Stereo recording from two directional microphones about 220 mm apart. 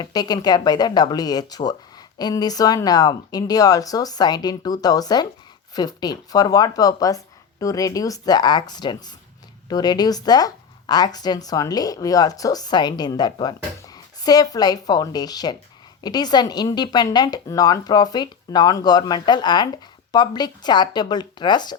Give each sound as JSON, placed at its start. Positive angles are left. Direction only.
{"t": 0.0, "sound": "speech", "side_deg": 15}